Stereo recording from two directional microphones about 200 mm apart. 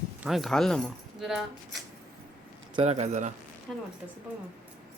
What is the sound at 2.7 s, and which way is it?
Speech, 30° right (ahead or behind).